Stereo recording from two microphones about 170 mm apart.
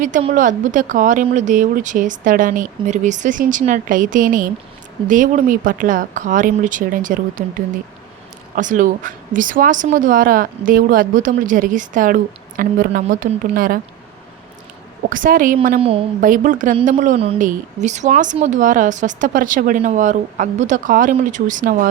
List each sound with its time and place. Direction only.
0.3 s a woman's voice: 50° right (ahead or behind)
8.5 s a woman's voice: 50° right (ahead or behind)
15.1 s a woman's voice: 55° right (ahead or behind)
15.8 s a woman's voice: 35° right (ahead or behind)
16.2 s a woman's voice: 55° right (ahead or behind)